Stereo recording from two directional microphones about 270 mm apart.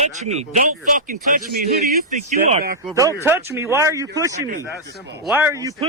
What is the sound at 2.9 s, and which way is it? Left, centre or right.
Speech, centre.